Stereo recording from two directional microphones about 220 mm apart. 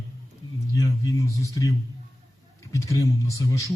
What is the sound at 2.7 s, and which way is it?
Speech, 15° left (ahead or behind).